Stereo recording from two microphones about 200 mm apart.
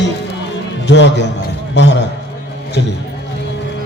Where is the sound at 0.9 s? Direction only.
60° left (ahead or behind).